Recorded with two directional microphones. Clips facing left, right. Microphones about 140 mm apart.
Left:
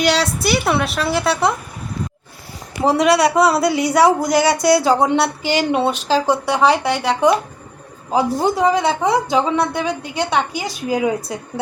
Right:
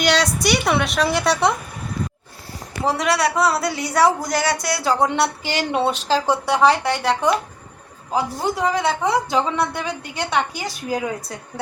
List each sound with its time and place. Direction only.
0.4 s a woman's voice: 5° left (ahead or behind)
2.8 s a woman's voice: 20° left (ahead or behind)